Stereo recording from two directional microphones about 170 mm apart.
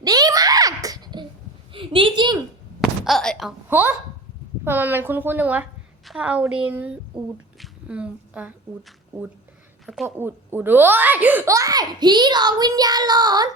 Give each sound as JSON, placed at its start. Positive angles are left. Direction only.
{"t": 0.0, "sound": "a sound", "side_deg": -20}
{"t": 3.0, "sound": "thunk", "side_deg": 0}
{"t": 3.7, "sound": "a woman's voice", "side_deg": -10}
{"t": 9.8, "sound": "a woman's voice", "side_deg": 0}
{"t": 10.2, "sound": "a child's voice", "side_deg": -10}